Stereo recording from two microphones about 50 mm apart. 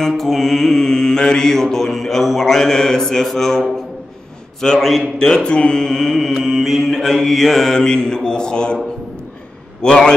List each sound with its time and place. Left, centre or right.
0.0 s mantra: centre
6.4 s mantra: centre
6.9 s mantra: centre
9.8 s a man's voice: centre